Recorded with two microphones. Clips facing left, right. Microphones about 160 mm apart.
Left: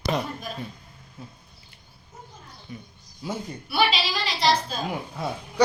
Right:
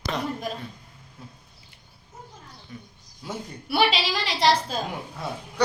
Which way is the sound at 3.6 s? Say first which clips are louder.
Right 1 dB; 70° right (ahead or behind).